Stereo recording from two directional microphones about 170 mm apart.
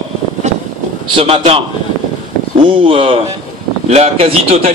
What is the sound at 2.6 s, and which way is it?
A man's voice, 30° right (ahead or behind).